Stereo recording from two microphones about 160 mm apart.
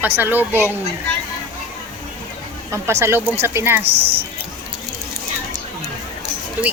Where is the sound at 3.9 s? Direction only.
35° right (ahead or behind).